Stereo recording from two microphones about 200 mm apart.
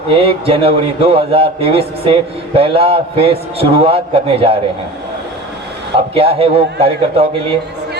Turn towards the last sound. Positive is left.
turn(degrees=-30)  # may be behind; listen again after turning